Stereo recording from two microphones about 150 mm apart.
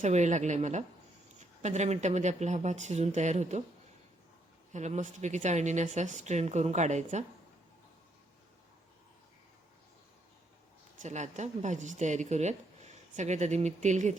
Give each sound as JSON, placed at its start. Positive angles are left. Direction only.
{"t": 0.0, "sound": "speech", "side_deg": -50}
{"t": 4.7, "sound": "speech", "side_deg": -50}
{"t": 11.0, "sound": "speech", "side_deg": -55}